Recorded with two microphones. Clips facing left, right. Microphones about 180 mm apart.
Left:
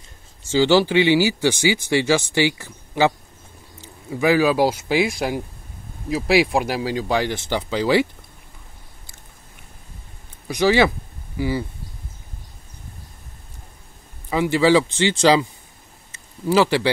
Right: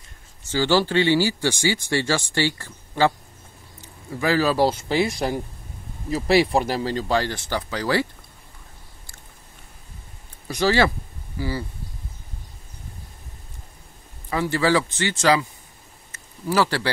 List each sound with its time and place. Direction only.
0.5 s speech: 15° left (ahead or behind)
4.1 s speech: 15° left (ahead or behind)
10.5 s speech: 15° left (ahead or behind)
14.3 s speech: 15° left (ahead or behind)
16.4 s speech: 20° left (ahead or behind)